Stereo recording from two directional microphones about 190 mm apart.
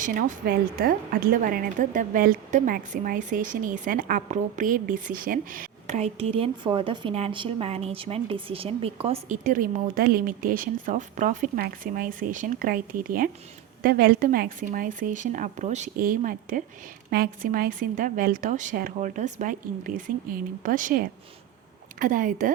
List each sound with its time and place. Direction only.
0.0 s a woman's voice: 45° right (ahead or behind)